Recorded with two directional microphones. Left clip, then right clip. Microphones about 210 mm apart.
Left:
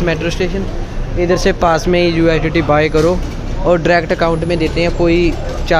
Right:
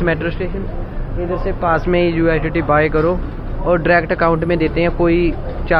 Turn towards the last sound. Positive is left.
turn(degrees=15)  # may be behind; listen again after turning